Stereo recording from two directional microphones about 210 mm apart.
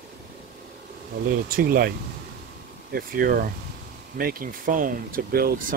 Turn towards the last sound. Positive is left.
turn(degrees=-45)  # may be behind; listen again after turning